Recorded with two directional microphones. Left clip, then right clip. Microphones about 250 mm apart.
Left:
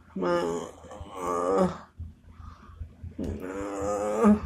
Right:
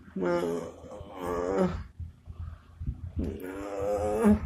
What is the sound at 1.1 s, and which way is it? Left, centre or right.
Wild animals, centre.